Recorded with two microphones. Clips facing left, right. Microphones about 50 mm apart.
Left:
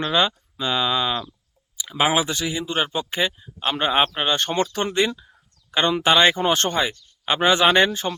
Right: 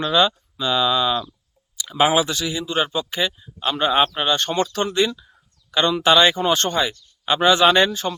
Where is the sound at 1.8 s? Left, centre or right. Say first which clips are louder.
Right 2 dB; centre.